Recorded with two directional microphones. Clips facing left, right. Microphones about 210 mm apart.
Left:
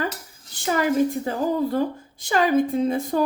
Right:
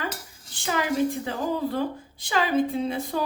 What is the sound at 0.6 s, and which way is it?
A woman's voice, 45° left (ahead or behind).